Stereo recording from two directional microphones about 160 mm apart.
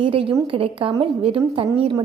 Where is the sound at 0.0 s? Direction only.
35° right (ahead or behind).